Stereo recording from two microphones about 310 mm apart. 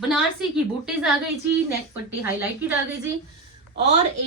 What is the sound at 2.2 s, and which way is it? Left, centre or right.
Speech, centre.